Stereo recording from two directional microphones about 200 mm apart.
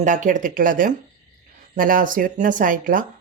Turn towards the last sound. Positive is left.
turn(degrees=-40)  # may be behind; listen again after turning